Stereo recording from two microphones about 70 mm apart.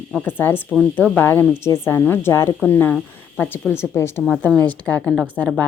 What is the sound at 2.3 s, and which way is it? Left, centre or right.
Speech, left.